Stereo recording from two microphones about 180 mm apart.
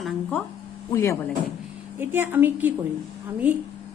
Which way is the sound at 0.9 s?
15° left (ahead or behind).